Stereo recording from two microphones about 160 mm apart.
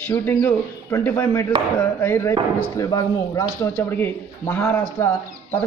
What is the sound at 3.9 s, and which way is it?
Speech, 15° left (ahead or behind).